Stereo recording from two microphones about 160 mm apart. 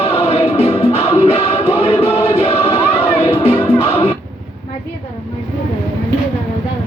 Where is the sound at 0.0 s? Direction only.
40° left (ahead or behind).